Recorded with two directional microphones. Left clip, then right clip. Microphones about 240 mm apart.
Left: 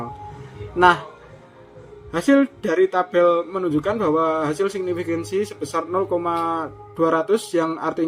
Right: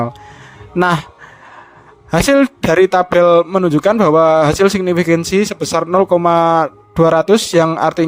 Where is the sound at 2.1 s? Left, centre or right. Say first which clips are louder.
Right 6 dB; right.